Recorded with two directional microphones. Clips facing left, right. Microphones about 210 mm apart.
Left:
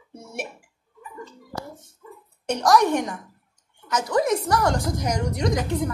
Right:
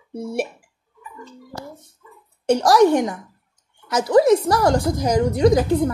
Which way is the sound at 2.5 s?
30° right (ahead or behind).